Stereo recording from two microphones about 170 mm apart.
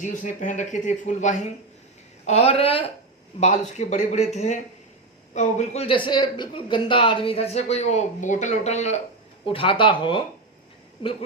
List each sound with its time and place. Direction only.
0.0 s speech: 50° left (ahead or behind); by 11.1 s 30° left (ahead or behind)